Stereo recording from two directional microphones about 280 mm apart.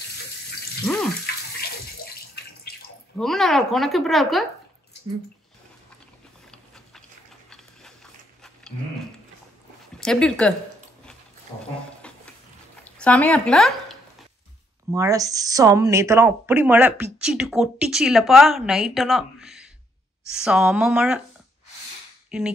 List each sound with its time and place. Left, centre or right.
0.8 s speech: centre
2.1 s water: left
3.2 s speech: centre
7.4 s dog: centre
9.9 s speech: centre
12.0 s a sound: centre
12.8 s speech: centre
14.9 s speech: centre